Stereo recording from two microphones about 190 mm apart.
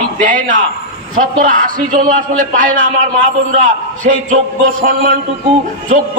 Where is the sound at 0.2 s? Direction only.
45° right (ahead or behind).